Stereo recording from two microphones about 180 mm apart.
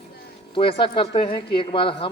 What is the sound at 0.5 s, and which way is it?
Speech, 30° left (ahead or behind).